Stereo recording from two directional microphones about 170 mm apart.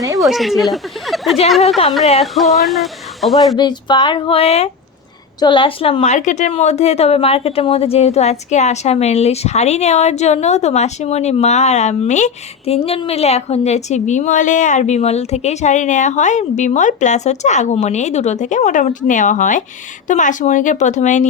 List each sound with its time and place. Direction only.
0.2 s speech: centre (ahead or behind)
3.6 s a woman's voice: 25° left (ahead or behind); by 21.2 s 45° left (ahead or behind)